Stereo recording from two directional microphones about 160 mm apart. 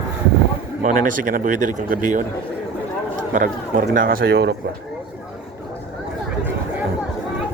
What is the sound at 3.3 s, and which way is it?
Speech, 60° right (ahead or behind).